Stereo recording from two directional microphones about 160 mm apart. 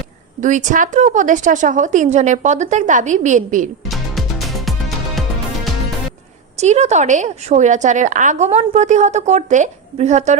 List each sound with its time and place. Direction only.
0.4 s a woman's voice: 50° right (ahead or behind)
3.8 s music: centre (ahead or behind)
6.6 s a woman's voice: 45° right (ahead or behind)